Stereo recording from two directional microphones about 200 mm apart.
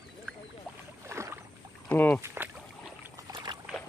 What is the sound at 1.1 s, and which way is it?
Rowboat, 15° right (ahead or behind).